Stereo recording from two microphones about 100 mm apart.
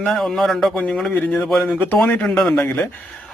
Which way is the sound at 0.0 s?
5° left (ahead or behind).